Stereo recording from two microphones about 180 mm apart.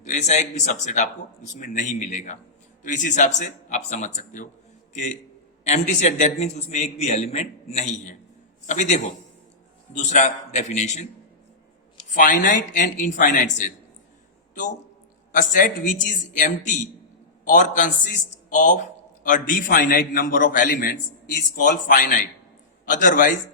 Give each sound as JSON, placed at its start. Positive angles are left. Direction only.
{"t": 0.0, "sound": "a man's voice", "side_deg": 40}
{"t": 5.6, "sound": "a man's voice", "side_deg": 40}
{"t": 12.1, "sound": "a man's voice", "side_deg": 45}
{"t": 15.3, "sound": "a man's voice", "side_deg": 50}